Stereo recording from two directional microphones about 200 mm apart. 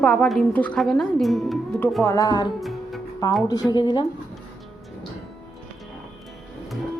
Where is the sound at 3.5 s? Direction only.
20° left (ahead or behind).